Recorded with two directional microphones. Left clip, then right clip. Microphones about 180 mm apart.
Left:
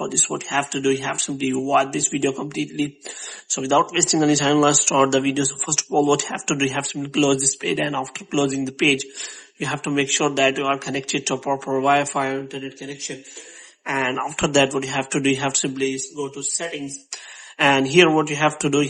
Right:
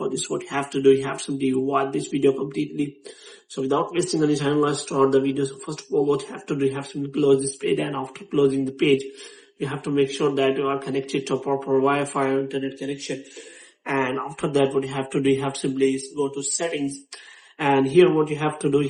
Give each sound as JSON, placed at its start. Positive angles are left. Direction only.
{"t": 0.0, "sound": "speech", "side_deg": 30}
{"t": 4.9, "sound": "speech", "side_deg": 45}
{"t": 7.6, "sound": "a man's voice", "side_deg": 25}
{"t": 13.8, "sound": "a man's voice", "side_deg": 30}
{"t": 14.2, "sound": "speech", "side_deg": 45}
{"t": 16.1, "sound": "speech", "side_deg": 15}
{"t": 17.6, "sound": "speech", "side_deg": 35}